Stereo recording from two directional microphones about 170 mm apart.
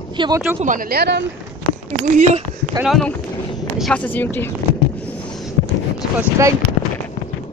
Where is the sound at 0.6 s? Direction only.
55° right (ahead or behind); by 1.3 s 80° right.